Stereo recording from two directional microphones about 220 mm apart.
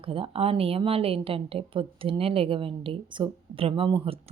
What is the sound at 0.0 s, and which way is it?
A woman's voice, 25° right (ahead or behind).